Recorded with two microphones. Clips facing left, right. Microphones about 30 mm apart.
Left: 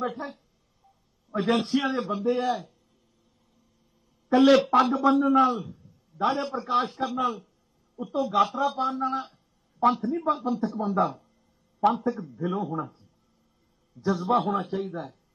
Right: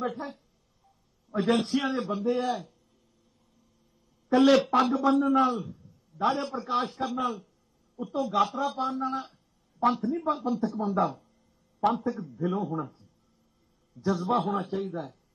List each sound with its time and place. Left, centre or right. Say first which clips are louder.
0.0 s a man's voice: left 1 dB; centre
4.3 s a man's voice: left 2 dB; centre